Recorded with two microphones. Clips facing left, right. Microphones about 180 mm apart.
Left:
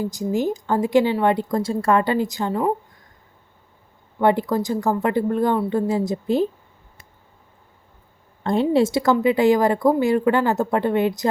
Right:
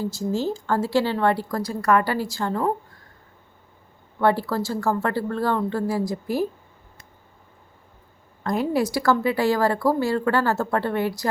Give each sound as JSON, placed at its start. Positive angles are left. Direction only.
{"t": 0.0, "sound": "a woman's voice", "side_deg": 15}
{"t": 4.2, "sound": "a woman's voice", "side_deg": 20}
{"t": 8.4, "sound": "speech", "side_deg": 25}